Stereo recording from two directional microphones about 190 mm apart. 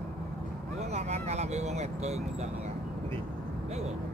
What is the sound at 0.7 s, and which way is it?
Vehicle, 35° right (ahead or behind).